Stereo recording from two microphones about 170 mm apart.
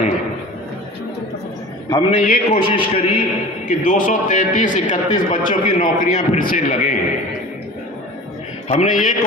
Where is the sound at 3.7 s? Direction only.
50° left (ahead or behind).